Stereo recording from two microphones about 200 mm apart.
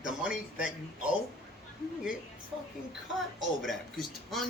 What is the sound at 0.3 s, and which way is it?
Speech, 5° right (ahead or behind).